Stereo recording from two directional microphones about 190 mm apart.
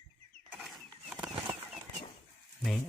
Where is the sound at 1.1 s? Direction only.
5° right (ahead or behind).